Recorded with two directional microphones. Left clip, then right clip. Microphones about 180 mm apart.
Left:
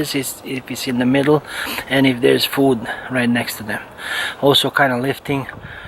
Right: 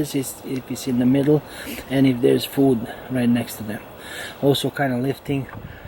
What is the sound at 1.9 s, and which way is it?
Speech, 25° left (ahead or behind).